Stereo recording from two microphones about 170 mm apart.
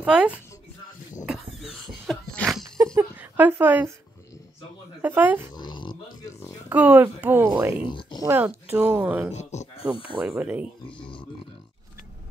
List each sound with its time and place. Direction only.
0.0 s speech: 5° right (ahead or behind)
1.2 s a sound: centre (ahead or behind)
2.8 s a sound: 15° right (ahead or behind)
5.0 s speech: 10° right (ahead or behind)
5.6 s dog: 25° left (ahead or behind)
6.7 s speech: 10° right (ahead or behind)
7.9 s a sound: 30° left (ahead or behind)
8.2 s speech: 15° right (ahead or behind)
9.3 s speech: 40° left (ahead or behind)
10.2 s speech: 10° right (ahead or behind)